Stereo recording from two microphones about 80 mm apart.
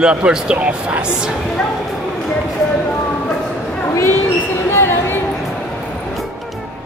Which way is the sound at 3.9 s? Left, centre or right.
Left.